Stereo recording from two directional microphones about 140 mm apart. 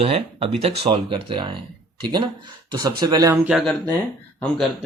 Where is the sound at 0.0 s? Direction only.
45° right (ahead or behind); by 3.3 s 30° right (ahead or behind).